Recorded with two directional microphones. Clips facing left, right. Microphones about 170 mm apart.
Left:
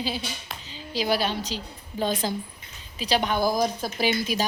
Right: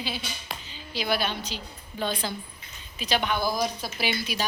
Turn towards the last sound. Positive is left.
turn(degrees=40)  # may be behind; listen again after turning